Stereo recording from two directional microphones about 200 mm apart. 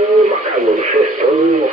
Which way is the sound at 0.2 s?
35° right (ahead or behind).